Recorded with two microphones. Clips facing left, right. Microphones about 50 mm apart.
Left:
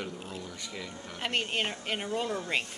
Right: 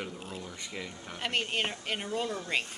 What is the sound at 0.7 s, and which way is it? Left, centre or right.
Speech, centre.